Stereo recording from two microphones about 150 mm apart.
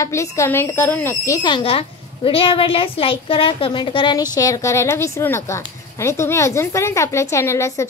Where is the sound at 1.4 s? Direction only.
35° left (ahead or behind).